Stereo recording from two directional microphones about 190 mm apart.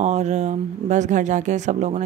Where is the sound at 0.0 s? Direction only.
35° right (ahead or behind).